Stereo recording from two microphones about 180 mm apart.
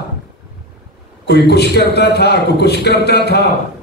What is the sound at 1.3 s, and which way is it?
A man's voice, 65° left (ahead or behind).